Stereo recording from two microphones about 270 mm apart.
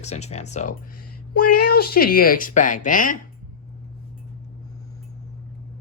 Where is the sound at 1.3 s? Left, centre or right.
Left.